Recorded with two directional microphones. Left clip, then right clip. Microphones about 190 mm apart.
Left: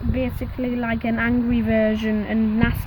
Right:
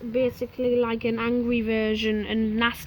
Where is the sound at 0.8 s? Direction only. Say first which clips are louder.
Left 3 dB; 40° left (ahead or behind).